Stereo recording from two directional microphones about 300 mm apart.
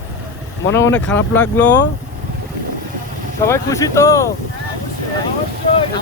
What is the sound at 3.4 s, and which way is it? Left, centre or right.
Speech, centre.